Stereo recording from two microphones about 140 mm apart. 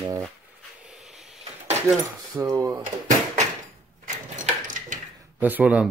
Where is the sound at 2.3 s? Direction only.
20° right (ahead or behind).